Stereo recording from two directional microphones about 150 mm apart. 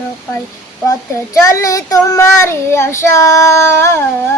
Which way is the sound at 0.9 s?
20° left (ahead or behind).